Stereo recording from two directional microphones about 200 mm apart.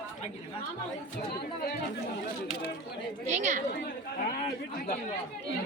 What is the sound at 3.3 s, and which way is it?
Speech, 35° right (ahead or behind).